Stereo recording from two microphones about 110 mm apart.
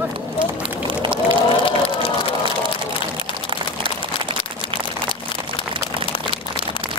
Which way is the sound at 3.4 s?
50° right (ahead or behind).